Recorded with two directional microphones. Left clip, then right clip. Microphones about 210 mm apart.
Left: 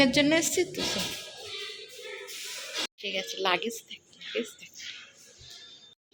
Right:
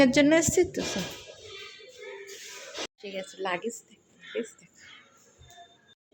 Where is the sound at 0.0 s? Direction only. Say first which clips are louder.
Right 2 dB; 20° right (ahead or behind).